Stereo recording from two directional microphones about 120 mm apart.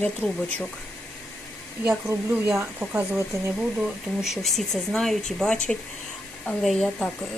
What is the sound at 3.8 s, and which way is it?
Speech, 5° right (ahead or behind).